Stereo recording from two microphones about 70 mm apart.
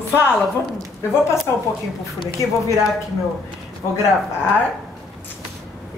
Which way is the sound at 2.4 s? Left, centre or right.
Left.